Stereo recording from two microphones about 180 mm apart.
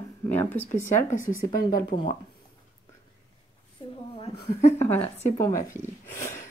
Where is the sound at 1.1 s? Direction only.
50° left (ahead or behind).